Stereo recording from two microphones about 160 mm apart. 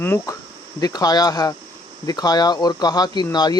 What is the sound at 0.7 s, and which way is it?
Speech, 25° left (ahead or behind).